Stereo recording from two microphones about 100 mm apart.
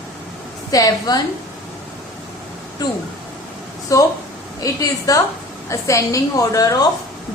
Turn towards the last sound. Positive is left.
turn(degrees=35)  # may be behind; listen again after turning